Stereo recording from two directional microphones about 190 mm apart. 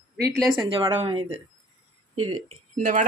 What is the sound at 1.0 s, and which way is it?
Speech, 30° right (ahead or behind).